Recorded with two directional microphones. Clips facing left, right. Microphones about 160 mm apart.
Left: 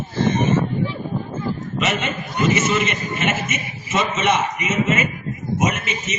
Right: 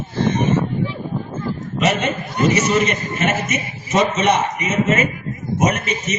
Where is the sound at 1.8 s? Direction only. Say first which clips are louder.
Right 5 dB; 40° right (ahead or behind).